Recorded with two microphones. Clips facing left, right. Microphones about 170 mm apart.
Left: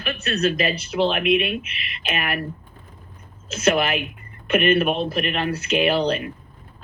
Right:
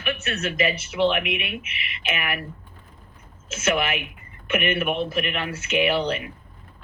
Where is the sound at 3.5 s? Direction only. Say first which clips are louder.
Left 4 dB; 35° left (ahead or behind).